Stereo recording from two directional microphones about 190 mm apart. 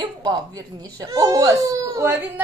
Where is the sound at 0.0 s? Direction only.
20° right (ahead or behind).